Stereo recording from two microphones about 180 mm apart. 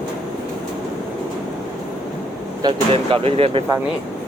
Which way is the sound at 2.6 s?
30° right (ahead or behind).